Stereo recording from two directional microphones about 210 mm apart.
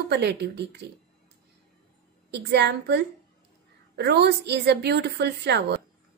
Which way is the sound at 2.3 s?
55° right (ahead or behind).